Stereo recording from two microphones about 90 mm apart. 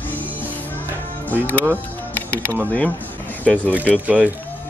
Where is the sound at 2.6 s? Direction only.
20° left (ahead or behind).